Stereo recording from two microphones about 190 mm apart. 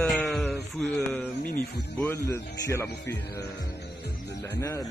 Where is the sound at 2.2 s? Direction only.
15° left (ahead or behind).